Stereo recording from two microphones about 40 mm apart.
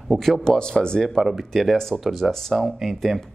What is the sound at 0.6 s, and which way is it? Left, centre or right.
Speech, centre.